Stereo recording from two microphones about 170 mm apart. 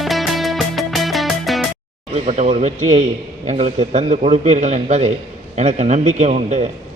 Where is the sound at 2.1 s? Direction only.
45° right (ahead or behind).